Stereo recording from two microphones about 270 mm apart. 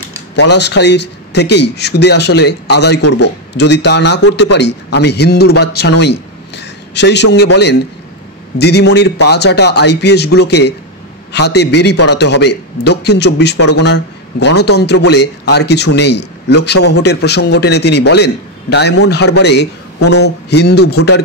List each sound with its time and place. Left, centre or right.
0.4 s a man's voice: left
20.0 s speech: left
20.2 s a man's voice: left